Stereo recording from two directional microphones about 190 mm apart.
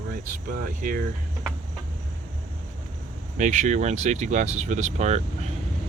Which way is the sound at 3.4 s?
40° right (ahead or behind).